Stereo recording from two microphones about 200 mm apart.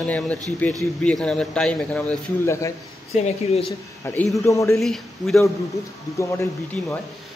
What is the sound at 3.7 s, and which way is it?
Speech, 10° left (ahead or behind).